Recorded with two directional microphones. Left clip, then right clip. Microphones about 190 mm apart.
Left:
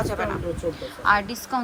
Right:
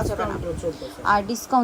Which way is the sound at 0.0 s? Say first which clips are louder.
Even; 15° right (ahead or behind).